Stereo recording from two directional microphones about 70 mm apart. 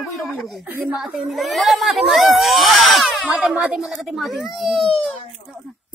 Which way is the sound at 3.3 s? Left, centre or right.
Centre.